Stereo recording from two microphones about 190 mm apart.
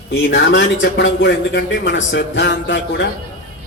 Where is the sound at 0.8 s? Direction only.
65° left (ahead or behind).